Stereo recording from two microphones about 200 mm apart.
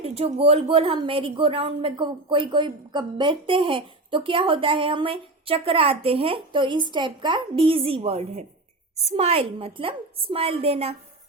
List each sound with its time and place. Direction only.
0.0 s speech: 30° right (ahead or behind)